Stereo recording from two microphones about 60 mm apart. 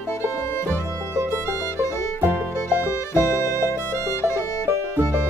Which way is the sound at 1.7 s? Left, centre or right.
Left.